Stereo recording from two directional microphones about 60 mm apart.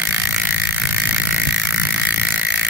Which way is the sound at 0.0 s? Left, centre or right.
Right.